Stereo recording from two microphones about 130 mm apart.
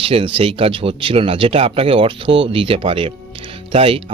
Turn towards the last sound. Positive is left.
turn(degrees=-45)  # may be behind; listen again after turning